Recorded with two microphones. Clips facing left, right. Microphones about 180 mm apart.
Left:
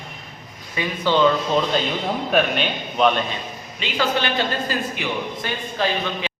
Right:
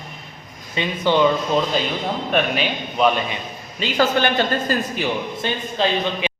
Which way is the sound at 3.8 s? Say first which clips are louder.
Right 4 dB; 40° right (ahead or behind).